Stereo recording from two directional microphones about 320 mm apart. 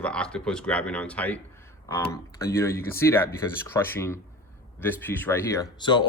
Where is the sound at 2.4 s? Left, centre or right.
Centre.